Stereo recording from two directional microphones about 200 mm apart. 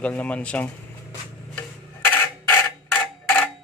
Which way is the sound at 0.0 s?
5° left (ahead or behind).